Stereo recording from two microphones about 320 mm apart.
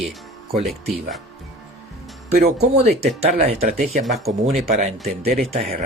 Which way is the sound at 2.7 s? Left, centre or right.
Centre.